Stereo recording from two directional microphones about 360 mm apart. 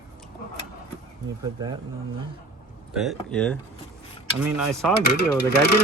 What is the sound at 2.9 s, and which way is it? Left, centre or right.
Speech, centre.